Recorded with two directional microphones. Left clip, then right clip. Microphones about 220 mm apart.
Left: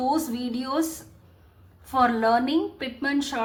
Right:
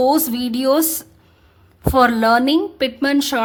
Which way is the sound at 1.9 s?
50° right (ahead or behind).